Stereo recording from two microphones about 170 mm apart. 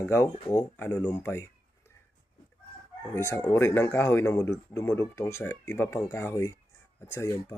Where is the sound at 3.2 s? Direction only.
15° left (ahead or behind).